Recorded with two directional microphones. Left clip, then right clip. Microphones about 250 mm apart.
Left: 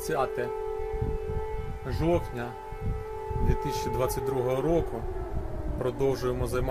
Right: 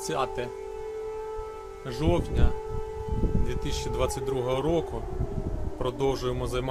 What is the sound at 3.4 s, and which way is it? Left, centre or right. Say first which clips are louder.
Speech: left 3 dB; centre.